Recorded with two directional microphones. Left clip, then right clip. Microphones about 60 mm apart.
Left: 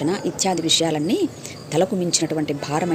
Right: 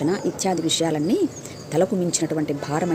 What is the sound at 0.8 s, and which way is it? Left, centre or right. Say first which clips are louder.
Speech: even; right.